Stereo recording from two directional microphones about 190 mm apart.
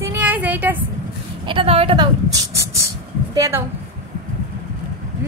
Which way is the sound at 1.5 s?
30° right (ahead or behind).